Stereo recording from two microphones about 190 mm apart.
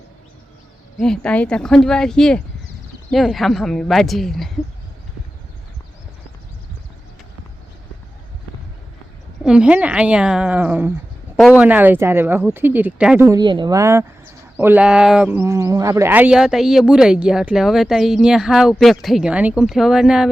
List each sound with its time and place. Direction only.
0.9 s speech: 5° left (ahead or behind)
9.4 s a woman's voice: 5° right (ahead or behind)
13.2 s speech: 20° right (ahead or behind); by 20.3 s 5° right (ahead or behind)